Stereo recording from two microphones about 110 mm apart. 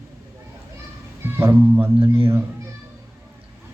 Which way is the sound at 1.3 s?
20° right (ahead or behind).